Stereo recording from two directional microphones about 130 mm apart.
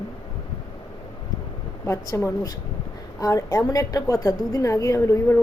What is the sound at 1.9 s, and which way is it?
A woman's voice, 25° left (ahead or behind).